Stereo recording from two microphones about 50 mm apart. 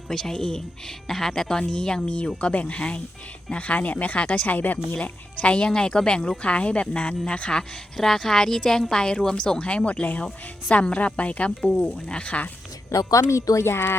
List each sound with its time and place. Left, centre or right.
0.1 s a woman's voice: centre
7.9 s a woman's voice: centre
12.9 s a woman's voice: left
13.7 s speech: left